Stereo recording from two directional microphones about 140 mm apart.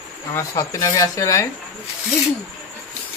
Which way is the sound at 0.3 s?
25° left (ahead or behind).